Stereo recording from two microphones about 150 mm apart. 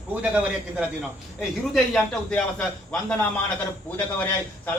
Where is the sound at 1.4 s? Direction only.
Centre (ahead or behind).